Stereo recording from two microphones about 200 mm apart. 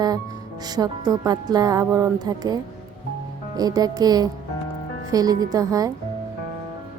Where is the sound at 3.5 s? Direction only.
20° right (ahead or behind).